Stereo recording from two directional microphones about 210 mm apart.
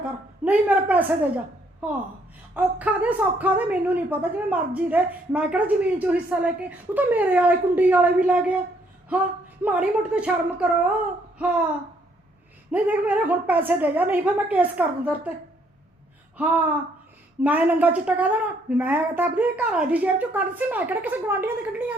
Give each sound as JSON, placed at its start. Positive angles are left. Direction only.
{"t": 0.4, "sound": "a woman's voice", "side_deg": -5}
{"t": 2.6, "sound": "a woman's voice", "side_deg": -5}
{"t": 9.6, "sound": "a woman's voice", "side_deg": -5}
{"t": 11.3, "sound": "a sound", "side_deg": -5}
{"t": 12.7, "sound": "a woman's voice", "side_deg": -5}
{"t": 16.4, "sound": "a woman's voice", "side_deg": -5}